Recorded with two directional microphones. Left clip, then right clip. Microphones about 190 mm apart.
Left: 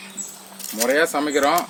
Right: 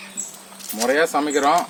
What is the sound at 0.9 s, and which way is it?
Speech, 15° left (ahead or behind).